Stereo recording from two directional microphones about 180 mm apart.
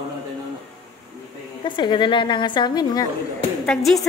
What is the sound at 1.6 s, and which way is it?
A woman's voice, 25° left (ahead or behind).